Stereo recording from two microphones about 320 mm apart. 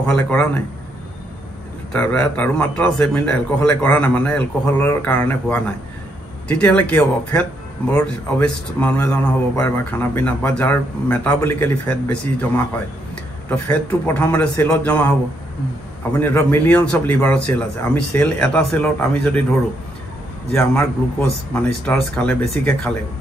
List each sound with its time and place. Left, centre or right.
0.1 s a man's voice: centre
1.9 s a man's voice: centre
20.5 s a man's voice: centre